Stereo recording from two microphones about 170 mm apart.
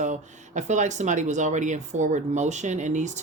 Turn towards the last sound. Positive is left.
turn(degrees=-45)  # may be behind; listen again after turning